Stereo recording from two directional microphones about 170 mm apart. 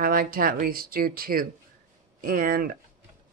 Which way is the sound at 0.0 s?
55° right (ahead or behind).